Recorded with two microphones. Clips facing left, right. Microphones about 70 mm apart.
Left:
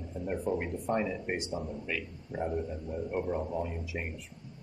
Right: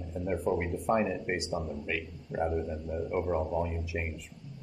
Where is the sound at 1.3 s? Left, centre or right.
Centre.